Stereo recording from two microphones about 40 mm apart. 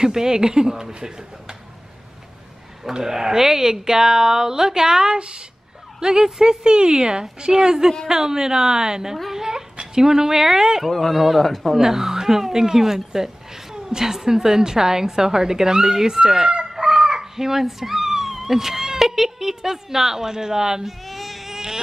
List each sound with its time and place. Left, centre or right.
0.0 s speech: centre
2.8 s speech: centre
10.9 s a man's voice: centre
11.7 s speech: centre
21.0 s baby cry: centre